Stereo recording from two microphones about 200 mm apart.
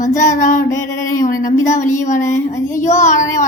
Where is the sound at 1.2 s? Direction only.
40° left (ahead or behind).